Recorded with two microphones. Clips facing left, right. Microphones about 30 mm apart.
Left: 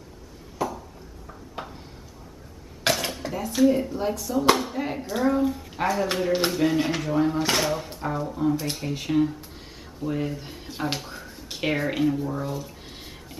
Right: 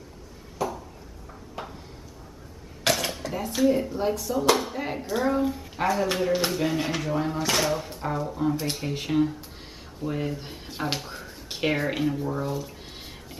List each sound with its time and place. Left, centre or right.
1.6 s a sound: left
2.9 s dishes: centre
3.4 s speech: centre